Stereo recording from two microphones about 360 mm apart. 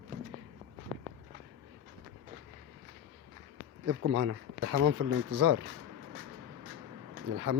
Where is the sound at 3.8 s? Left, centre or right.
Right.